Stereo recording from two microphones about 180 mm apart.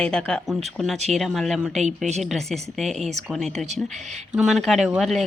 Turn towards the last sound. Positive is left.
turn(degrees=0)  # may be behind; listen again after turning